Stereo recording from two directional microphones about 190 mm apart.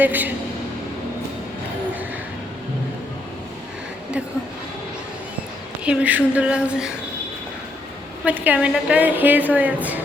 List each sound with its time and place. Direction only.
0.0 s a woman's voice: 10° right (ahead or behind)
5.8 s speech: 5° right (ahead or behind)
8.2 s a woman's voice: 5° right (ahead or behind)